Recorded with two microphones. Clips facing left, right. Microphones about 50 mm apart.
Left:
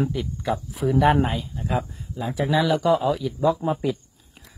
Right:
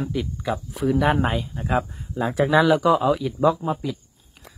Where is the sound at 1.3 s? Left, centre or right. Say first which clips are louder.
Right 3 dB; right.